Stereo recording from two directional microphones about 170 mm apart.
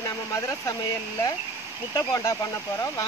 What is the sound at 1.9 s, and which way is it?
Speech, 20° left (ahead or behind).